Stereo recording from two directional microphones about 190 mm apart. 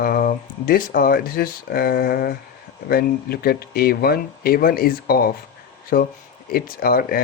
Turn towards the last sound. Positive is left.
turn(degrees=50)  # may be behind; listen again after turning